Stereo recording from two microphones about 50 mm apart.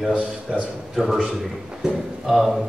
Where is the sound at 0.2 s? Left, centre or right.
Centre.